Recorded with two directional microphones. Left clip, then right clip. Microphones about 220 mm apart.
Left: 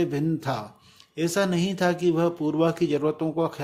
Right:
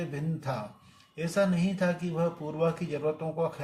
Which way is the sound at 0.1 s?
45° left (ahead or behind).